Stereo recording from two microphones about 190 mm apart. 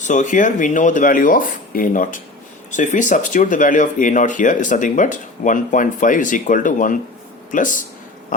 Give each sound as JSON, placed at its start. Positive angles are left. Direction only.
{"t": 0.0, "sound": "speech", "side_deg": 40}